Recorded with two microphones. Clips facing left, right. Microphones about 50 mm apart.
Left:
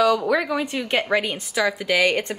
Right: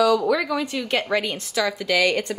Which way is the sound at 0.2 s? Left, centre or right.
Left.